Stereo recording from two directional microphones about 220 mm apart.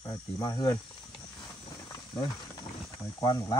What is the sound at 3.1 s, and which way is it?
Speech, 20° left (ahead or behind).